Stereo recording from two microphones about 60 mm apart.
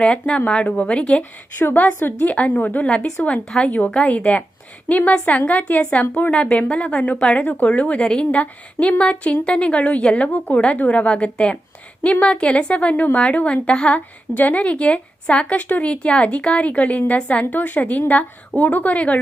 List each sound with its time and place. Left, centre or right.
0.0 s speech: centre
1.5 s speech: left